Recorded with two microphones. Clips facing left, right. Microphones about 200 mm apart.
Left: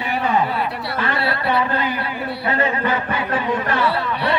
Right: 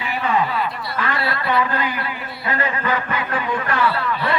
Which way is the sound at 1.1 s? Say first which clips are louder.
Left 1 dB; 30° left (ahead or behind).